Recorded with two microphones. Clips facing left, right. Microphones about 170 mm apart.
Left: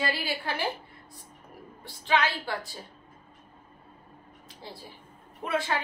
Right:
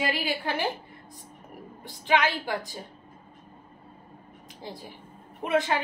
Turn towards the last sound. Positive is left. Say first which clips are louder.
# right 4 dB
turn(degrees=-20)  # may be behind; listen again after turning